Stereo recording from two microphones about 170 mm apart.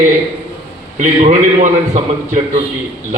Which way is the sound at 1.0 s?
45° right (ahead or behind).